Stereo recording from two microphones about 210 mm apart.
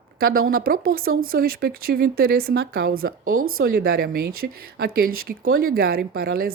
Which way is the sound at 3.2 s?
75° right (ahead or behind).